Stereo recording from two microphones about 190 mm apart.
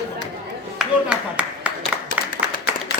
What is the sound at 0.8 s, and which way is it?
Speech, 5° right (ahead or behind).